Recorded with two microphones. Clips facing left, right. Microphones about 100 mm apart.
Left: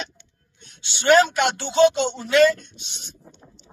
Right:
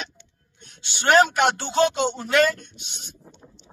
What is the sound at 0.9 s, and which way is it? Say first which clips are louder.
Speech: left 1 dB; 45° right (ahead or behind).